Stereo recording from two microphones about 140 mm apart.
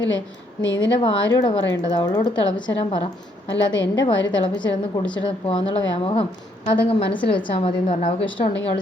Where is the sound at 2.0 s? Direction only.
30° left (ahead or behind).